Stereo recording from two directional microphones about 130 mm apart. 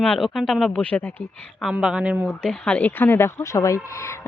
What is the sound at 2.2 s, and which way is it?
Speech, 5° left (ahead or behind).